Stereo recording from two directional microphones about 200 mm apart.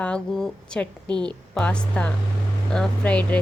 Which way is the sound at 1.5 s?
5° left (ahead or behind).